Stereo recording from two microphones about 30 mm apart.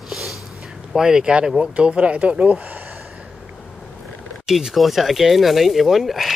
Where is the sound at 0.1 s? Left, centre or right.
Centre.